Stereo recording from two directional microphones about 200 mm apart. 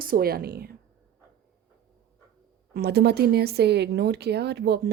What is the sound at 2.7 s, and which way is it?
Speech, 55° right (ahead or behind).